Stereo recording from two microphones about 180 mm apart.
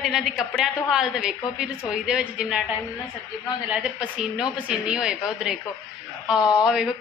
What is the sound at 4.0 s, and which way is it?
A woman's voice, 5° right (ahead or behind).